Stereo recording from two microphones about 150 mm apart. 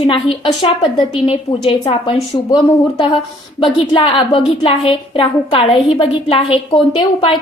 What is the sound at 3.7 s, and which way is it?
A woman's voice, 35° left (ahead or behind).